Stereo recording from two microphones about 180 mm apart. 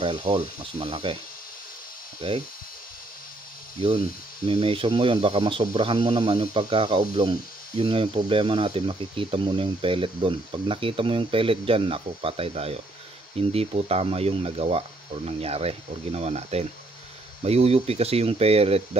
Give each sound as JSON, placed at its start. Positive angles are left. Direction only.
{"t": 0.0, "sound": "speech", "side_deg": -30}
{"t": 2.2, "sound": "speech", "side_deg": -25}
{"t": 3.8, "sound": "speech", "side_deg": -35}